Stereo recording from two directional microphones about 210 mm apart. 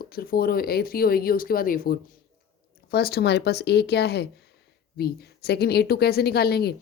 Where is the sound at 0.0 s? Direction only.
45° left (ahead or behind).